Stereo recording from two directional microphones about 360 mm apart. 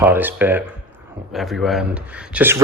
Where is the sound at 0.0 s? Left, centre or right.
Centre.